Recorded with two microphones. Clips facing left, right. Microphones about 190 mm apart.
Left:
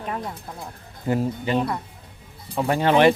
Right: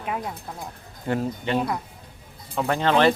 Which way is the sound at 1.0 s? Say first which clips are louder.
Left 2 dB; 5° left (ahead or behind).